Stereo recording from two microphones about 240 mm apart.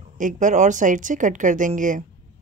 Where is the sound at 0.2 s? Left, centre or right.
Right.